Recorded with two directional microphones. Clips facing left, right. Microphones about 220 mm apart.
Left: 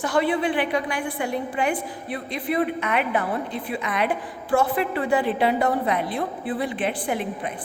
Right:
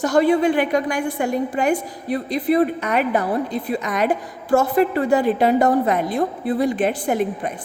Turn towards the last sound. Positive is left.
turn(degrees=-45)  # may be behind; listen again after turning